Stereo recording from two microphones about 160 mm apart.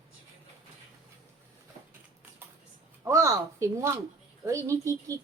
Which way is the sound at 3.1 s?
20° right (ahead or behind).